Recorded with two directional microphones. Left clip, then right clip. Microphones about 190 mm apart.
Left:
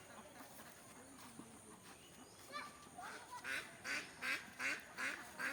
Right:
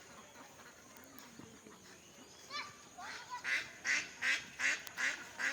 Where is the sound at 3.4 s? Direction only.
50° left (ahead or behind).